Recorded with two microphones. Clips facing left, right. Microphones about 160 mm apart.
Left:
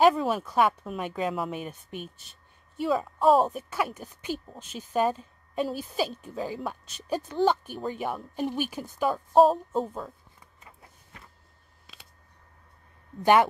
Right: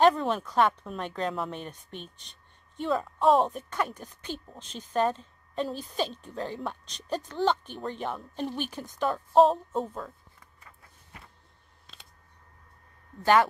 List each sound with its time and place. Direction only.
0.0 s a woman's voice: 5° left (ahead or behind)
13.2 s a woman's voice: 15° left (ahead or behind)